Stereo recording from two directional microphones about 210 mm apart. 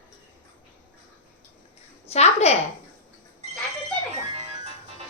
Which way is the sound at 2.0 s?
30° left (ahead or behind).